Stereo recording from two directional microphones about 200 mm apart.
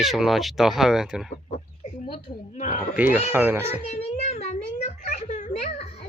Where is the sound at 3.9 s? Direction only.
35° left (ahead or behind).